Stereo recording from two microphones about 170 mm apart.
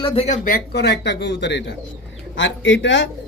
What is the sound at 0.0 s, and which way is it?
Speech, 35° left (ahead or behind).